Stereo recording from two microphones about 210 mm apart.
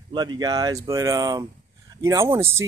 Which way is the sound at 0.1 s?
20° right (ahead or behind).